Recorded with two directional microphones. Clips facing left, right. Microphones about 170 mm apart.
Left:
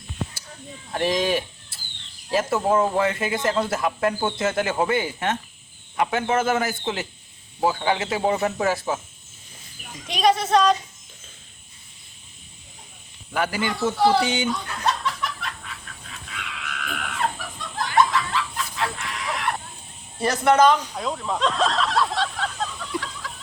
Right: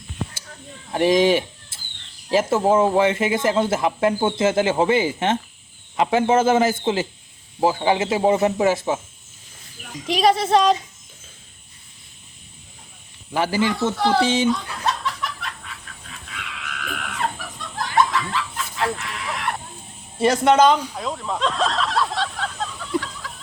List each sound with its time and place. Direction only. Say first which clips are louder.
0.9 s speech: right 6 dB; 20° right (ahead or behind)
10.2 s speech: right 1 dB; 30° right (ahead or behind)
13.3 s speech: right 4 dB; 25° right (ahead or behind)
14.4 s snicker: right 3 dB; centre (ahead or behind)
20.1 s speech: right 3 dB; 25° right (ahead or behind)
20.7 s a sound: right 1 dB; 5° right (ahead or behind)